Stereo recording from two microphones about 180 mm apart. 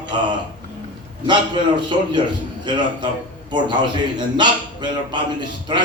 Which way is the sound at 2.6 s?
25° right (ahead or behind).